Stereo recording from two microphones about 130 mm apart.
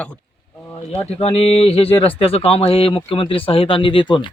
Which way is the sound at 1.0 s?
50° left (ahead or behind).